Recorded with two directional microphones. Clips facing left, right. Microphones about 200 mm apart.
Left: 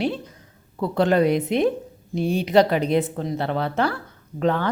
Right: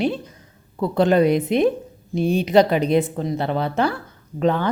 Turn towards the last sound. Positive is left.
turn(degrees=-15)  # may be behind; listen again after turning